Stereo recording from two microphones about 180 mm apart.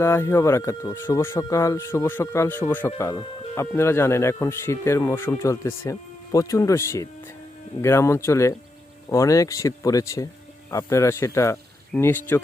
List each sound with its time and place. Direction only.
0.0 s speech: 15° left (ahead or behind)